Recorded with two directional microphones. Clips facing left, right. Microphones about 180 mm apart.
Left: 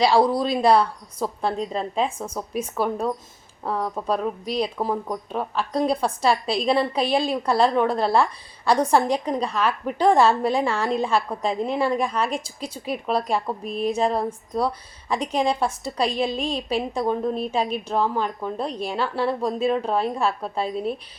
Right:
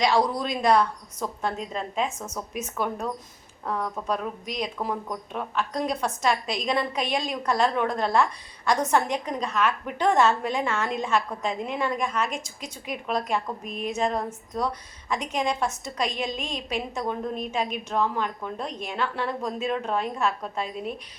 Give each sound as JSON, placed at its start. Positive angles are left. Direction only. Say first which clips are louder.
{"t": 0.0, "sound": "speech", "louder": "left 5 dB", "side_deg": 30}